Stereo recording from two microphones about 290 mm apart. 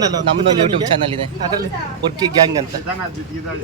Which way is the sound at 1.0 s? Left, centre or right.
Centre.